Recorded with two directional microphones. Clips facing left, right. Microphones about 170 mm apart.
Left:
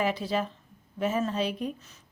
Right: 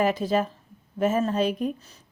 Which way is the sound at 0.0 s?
45° right (ahead or behind).